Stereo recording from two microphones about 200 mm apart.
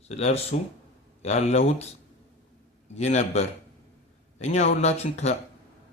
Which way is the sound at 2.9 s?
35° left (ahead or behind).